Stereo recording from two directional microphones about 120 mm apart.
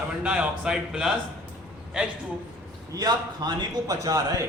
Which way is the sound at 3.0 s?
35° right (ahead or behind).